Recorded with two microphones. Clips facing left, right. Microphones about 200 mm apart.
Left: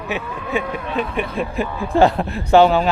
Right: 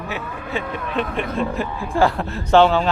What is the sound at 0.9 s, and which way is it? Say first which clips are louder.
Speech: even; 5° left (ahead or behind).